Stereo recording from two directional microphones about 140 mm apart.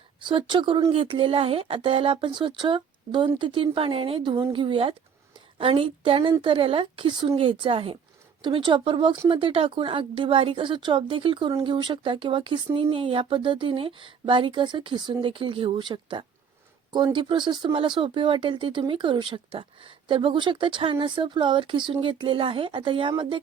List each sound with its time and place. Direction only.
0.2 s speech: 35° right (ahead or behind)